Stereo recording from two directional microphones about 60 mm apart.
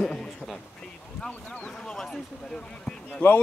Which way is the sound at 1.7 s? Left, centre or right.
Centre.